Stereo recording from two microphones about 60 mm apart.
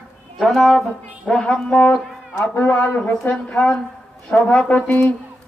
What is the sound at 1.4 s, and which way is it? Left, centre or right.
Speech, centre.